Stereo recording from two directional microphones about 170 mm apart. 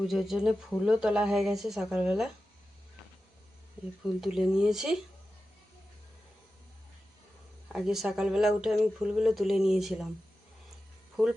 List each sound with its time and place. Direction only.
0.0 s speech: centre (ahead or behind)
4.2 s speech: 5° right (ahead or behind)
7.7 s speech: centre (ahead or behind)
11.2 s speech: centre (ahead or behind)